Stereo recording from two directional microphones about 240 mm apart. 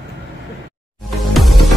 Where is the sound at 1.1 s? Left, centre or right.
Centre.